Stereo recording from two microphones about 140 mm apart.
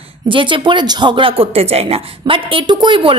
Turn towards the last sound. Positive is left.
turn(degrees=-35)  # may be behind; listen again after turning